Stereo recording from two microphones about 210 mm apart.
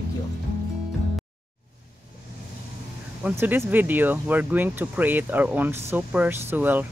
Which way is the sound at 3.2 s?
10° right (ahead or behind).